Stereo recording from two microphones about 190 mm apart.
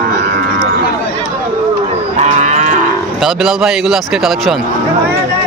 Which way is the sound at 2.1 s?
40° right (ahead or behind).